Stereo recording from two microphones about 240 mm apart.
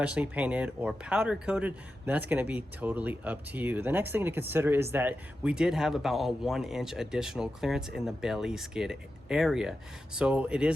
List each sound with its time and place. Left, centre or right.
0.0 s speech: centre